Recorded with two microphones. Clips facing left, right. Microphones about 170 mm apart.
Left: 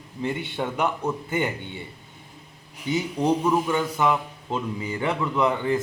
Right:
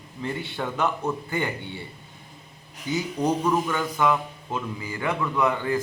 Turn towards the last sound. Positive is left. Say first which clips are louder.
# left 1 dB
turn(degrees=25)  # may be behind; listen again after turning